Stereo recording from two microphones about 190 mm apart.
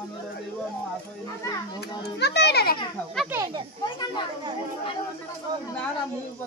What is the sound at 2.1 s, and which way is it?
Speech, 65° left (ahead or behind).